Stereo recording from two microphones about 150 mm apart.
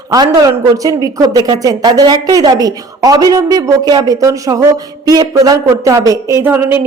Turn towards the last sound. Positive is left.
turn(degrees=-15)  # may be behind; listen again after turning